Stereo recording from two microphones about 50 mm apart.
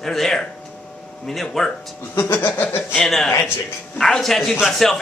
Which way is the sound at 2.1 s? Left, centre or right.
Left.